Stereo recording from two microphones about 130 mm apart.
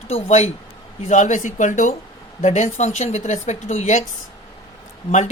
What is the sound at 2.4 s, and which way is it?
Speech, 65° left (ahead or behind).